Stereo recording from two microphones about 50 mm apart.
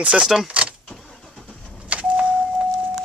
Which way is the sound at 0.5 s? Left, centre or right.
Right.